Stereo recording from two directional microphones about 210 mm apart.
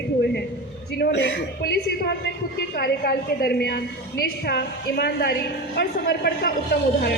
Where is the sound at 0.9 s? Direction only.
50° left (ahead or behind).